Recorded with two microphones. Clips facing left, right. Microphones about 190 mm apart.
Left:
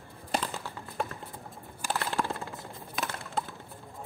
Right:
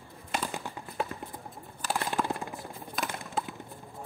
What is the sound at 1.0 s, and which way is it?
Clip-clop, 5° right (ahead or behind).